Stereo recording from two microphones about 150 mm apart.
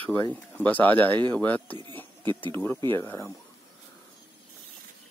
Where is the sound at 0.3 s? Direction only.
10° left (ahead or behind).